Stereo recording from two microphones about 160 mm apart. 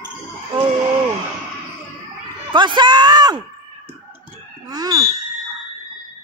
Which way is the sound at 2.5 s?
30° right (ahead or behind).